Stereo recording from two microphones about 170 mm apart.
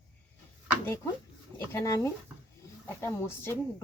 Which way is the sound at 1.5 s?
20° left (ahead or behind).